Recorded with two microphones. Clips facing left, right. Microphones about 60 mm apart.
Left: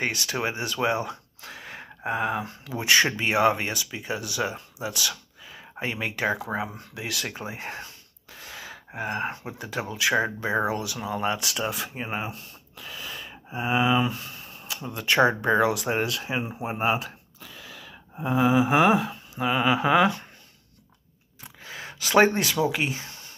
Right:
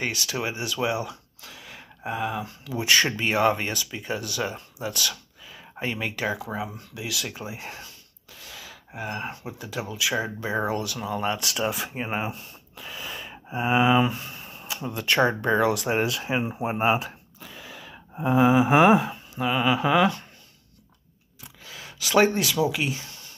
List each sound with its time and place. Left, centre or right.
0.0 s speech: left; by 5.1 s centre
5.5 s a sound: centre
6.2 s speech: left
10.5 s speech: centre
11.5 s speech: centre
12.0 s gasp: centre
15.0 s speech: centre
15.9 s speech: centre
19.3 s speech: centre
21.6 s speech: left